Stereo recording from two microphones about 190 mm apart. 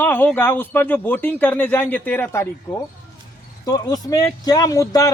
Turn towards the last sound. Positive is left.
turn(degrees=15)  # may be behind; listen again after turning